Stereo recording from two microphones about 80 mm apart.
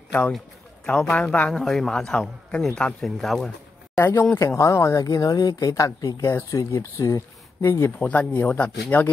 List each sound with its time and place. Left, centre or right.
0.8 s speech: centre
1.5 s a man's voice: centre
3.9 s speech: left
8.1 s speech: centre